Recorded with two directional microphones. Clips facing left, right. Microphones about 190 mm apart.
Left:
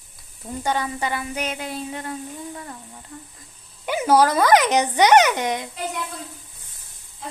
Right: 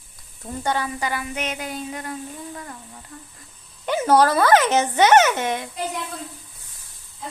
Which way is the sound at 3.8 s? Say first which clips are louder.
Even; 10° left (ahead or behind).